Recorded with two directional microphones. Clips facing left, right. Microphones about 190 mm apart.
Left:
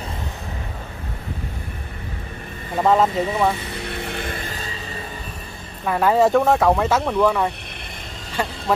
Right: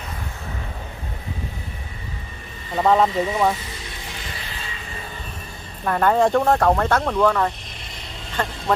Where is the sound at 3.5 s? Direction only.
60° left (ahead or behind); by 4.7 s 45° left (ahead or behind).